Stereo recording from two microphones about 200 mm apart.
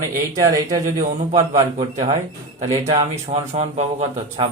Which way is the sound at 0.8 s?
35° right (ahead or behind).